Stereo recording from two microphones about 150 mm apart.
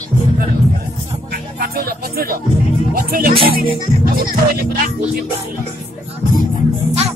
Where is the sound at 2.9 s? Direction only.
75° right (ahead or behind).